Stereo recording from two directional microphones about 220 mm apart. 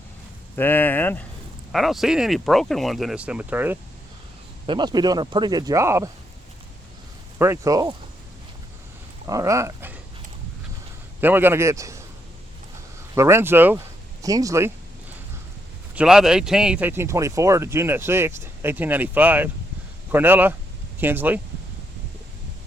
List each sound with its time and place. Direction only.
0.5 s speech: 10° left (ahead or behind); by 3.8 s 10° right (ahead or behind)
4.6 s speech: 20° right (ahead or behind)
7.3 s speech: 10° right (ahead or behind)
9.2 s speech: 15° right (ahead or behind)
11.2 s a man's voice: 10° right (ahead or behind)
13.1 s speech: 10° right (ahead or behind)
16.0 s speech: 5° right (ahead or behind)